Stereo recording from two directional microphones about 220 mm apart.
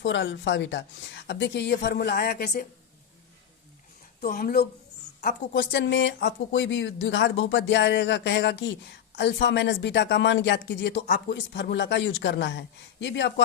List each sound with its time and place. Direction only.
0.0 s speech: 55° left (ahead or behind)
4.2 s speech: 45° left (ahead or behind)